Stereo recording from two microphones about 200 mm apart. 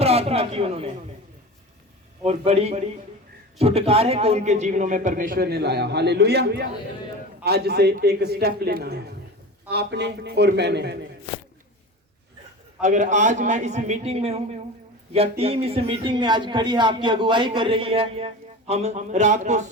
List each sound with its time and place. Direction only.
0.0 s a sound: 30° right (ahead or behind)
2.2 s a man's voice: 30° right (ahead or behind); by 10.9 s 55° right (ahead or behind)
12.8 s a man's voice: 35° right (ahead or behind)